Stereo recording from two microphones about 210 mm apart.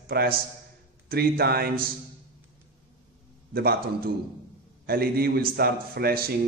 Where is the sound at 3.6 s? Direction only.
45° right (ahead or behind).